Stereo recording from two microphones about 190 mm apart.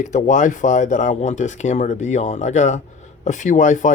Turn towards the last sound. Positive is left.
turn(degrees=40)  # may be behind; listen again after turning